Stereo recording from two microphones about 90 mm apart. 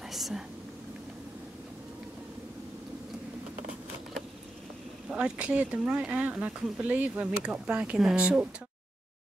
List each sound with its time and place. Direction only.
0.1 s whispering: centre (ahead or behind)
5.1 s speech: 10° right (ahead or behind)